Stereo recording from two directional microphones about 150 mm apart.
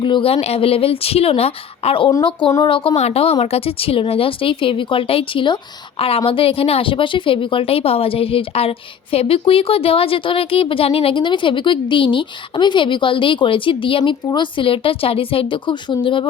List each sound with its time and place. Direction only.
0.0 s speech: 35° left (ahead or behind)